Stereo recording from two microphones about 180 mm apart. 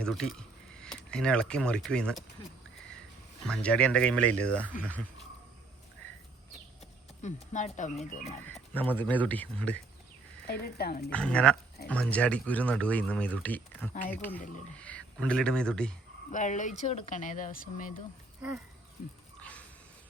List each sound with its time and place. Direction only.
0.0 s speech: centre (ahead or behind)
3.4 s speech: 5° left (ahead or behind)
7.2 s speech: 40° left (ahead or behind)
8.7 s speech: 10° left (ahead or behind)
10.4 s speech: 60° left (ahead or behind)
11.1 s speech: 5° left (ahead or behind)
16.3 s speech: 45° left (ahead or behind)
19.4 s a sound: 5° left (ahead or behind)